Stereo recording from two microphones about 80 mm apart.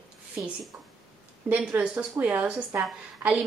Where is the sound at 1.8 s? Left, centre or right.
Centre.